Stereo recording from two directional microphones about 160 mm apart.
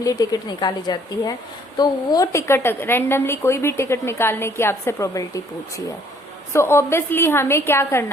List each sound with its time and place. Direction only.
0.0 s a woman's voice: 20° left (ahead or behind)